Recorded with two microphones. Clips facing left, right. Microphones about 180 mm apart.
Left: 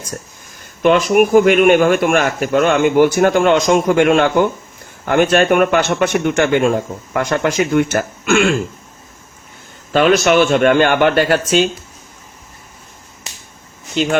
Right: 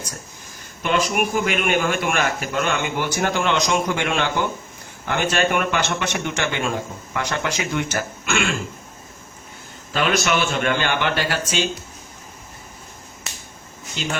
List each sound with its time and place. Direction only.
0.8 s speech: 50° left (ahead or behind)
9.9 s a man's voice: 45° left (ahead or behind)